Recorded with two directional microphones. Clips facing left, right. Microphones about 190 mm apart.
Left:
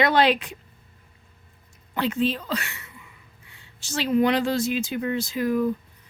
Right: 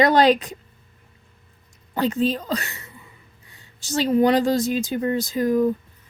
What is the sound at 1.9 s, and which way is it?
A woman's voice, 40° right (ahead or behind).